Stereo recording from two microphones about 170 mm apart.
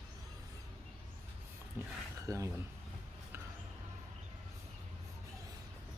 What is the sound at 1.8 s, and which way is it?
Speech, 15° right (ahead or behind).